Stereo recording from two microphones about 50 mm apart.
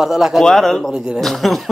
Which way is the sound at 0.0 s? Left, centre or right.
Centre.